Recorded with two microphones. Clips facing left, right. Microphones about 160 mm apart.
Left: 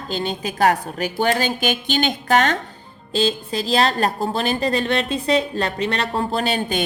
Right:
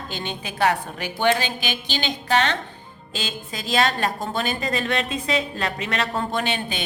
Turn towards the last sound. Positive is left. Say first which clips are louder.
# left 4 dB
turn(degrees=40)  # may be behind; listen again after turning